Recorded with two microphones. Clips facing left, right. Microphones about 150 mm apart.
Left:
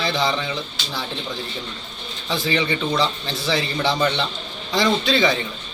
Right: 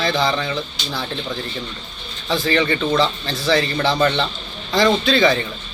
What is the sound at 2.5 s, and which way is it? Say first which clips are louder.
A man's voice: right 3 dB; 15° left (ahead or behind).